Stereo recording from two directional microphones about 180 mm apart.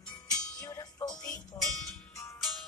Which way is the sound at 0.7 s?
15° left (ahead or behind).